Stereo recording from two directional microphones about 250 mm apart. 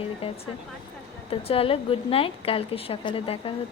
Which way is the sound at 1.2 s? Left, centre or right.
Left.